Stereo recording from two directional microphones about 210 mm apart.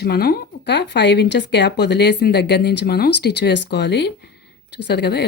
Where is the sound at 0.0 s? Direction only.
50° left (ahead or behind).